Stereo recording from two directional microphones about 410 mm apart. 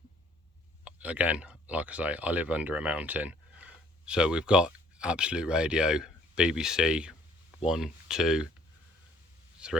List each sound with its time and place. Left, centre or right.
0.9 s speech: centre
9.6 s speech: centre